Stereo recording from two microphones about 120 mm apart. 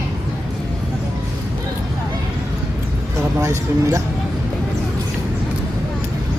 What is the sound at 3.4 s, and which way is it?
Speech, 25° right (ahead or behind).